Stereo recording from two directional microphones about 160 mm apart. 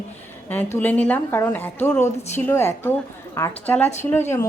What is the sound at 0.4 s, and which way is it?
A woman's voice, 10° left (ahead or behind).